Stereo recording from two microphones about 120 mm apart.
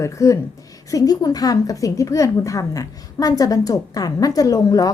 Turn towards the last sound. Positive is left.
turn(degrees=30)  # may be behind; listen again after turning